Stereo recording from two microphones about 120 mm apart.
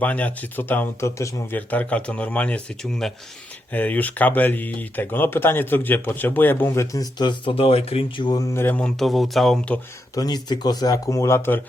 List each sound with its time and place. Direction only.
0.0 s speech: 15° left (ahead or behind)
1.5 s speech: 10° left (ahead or behind); by 8.4 s 40° left (ahead or behind)
8.5 s speech: 15° left (ahead or behind)
10.2 s speech: 35° left (ahead or behind); by 11.6 s 20° left (ahead or behind)